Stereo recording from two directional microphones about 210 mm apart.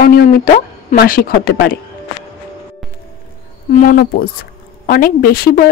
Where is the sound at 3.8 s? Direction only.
45° left (ahead or behind).